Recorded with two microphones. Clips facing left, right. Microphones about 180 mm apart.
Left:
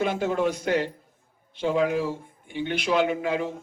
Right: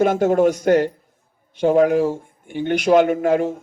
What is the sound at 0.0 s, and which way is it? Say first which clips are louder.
Speech: right 9 dB; 45° right (ahead or behind).